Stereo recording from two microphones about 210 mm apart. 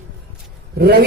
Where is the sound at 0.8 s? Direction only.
50° right (ahead or behind).